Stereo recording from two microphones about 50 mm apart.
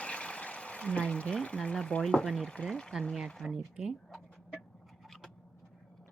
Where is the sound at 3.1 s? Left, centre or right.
Centre.